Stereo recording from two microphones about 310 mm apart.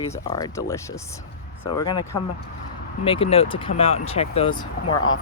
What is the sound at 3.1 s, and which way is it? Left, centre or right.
Speech, centre.